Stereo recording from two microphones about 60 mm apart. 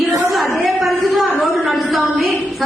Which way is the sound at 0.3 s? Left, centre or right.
Centre.